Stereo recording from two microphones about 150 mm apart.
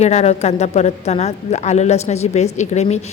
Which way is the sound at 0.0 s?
45° left (ahead or behind).